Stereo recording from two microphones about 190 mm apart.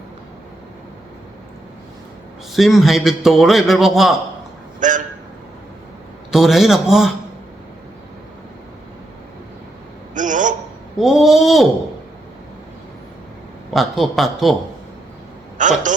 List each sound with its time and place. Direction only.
2.5 s a man's voice: centre (ahead or behind)
4.8 s a sound: 40° right (ahead or behind)
6.3 s a man's voice: centre (ahead or behind)
10.2 s a sound: 40° right (ahead or behind)
10.9 s a man's voice: centre (ahead or behind)
13.7 s a man's voice: centre (ahead or behind)
15.5 s a man's voice: 40° right (ahead or behind)